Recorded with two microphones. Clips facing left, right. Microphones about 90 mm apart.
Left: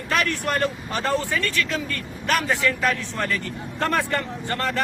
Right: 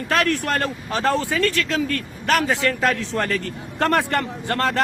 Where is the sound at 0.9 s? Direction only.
80° right.